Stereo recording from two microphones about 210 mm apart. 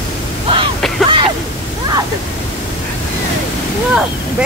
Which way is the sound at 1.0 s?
25° right (ahead or behind).